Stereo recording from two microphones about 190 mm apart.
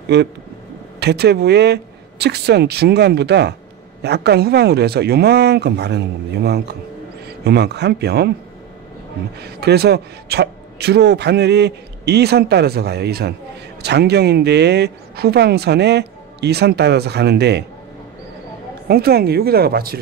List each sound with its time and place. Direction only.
0.1 s a man's voice: 60° right (ahead or behind)
9.4 s a man's voice: 60° right (ahead or behind)
18.9 s a man's voice: 55° right (ahead or behind)